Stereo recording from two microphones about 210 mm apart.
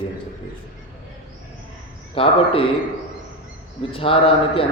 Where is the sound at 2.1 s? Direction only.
25° left (ahead or behind).